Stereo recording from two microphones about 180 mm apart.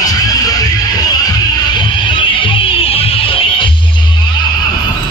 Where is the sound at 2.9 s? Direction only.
30° left (ahead or behind).